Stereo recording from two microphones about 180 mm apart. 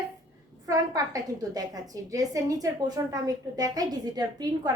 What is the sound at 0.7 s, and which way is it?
A woman's voice, 20° right (ahead or behind).